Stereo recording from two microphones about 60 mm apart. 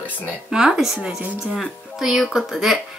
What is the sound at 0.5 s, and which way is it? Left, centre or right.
Speech, centre.